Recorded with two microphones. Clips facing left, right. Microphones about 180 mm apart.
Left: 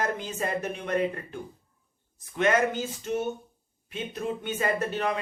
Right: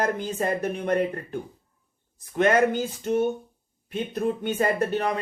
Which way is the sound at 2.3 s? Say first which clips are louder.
Right 4 dB; 50° right (ahead or behind).